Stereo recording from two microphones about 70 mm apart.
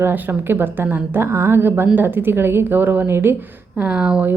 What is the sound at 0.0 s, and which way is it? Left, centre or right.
A woman's voice, right.